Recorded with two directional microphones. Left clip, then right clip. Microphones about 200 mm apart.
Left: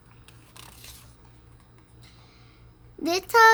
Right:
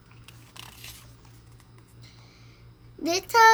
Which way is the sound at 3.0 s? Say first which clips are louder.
Left 1 dB; 40° left (ahead or behind).